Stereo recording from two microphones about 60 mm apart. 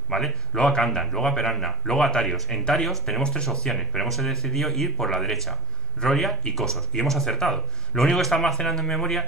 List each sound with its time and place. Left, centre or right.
0.1 s a man's voice: centre
3.2 s speech: centre
3.6 s a man's voice: centre